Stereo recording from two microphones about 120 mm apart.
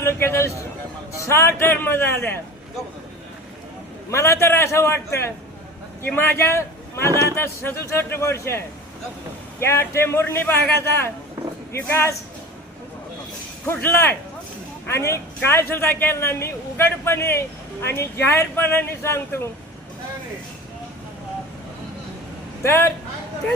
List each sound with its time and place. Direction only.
0.0 s a man's voice: 20° left (ahead or behind)
4.1 s a man's voice: 25° left (ahead or behind)
13.7 s a man's voice: 20° left (ahead or behind)
22.6 s a man's voice: 20° left (ahead or behind)